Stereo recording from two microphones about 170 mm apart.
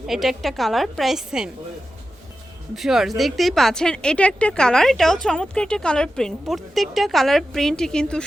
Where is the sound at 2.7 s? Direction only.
Centre (ahead or behind).